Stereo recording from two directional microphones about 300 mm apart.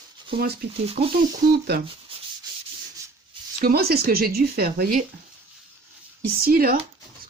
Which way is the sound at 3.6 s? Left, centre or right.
Right.